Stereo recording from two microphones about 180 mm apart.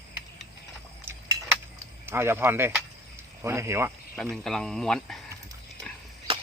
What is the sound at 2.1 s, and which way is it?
Cutlery, 15° right (ahead or behind).